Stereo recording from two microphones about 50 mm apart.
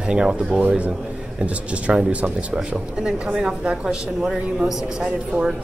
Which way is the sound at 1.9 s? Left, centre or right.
Centre.